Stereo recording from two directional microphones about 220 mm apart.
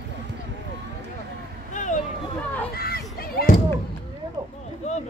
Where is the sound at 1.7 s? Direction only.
35° left (ahead or behind).